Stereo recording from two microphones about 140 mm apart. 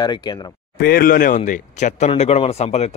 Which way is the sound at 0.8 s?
90° left.